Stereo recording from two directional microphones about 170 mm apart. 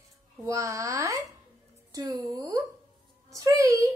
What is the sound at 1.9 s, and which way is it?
Speech, 20° right (ahead or behind).